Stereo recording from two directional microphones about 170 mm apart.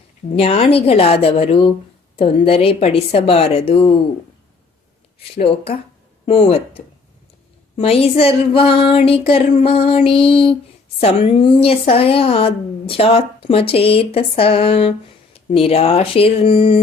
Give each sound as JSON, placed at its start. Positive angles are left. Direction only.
{"t": 0.3, "sound": "a woman's voice", "side_deg": 35}
{"t": 5.3, "sound": "a woman's voice", "side_deg": 35}